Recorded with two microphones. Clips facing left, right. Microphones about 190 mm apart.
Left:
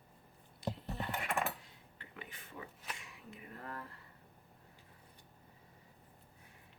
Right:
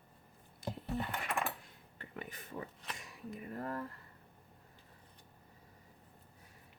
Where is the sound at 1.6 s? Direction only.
45° right (ahead or behind).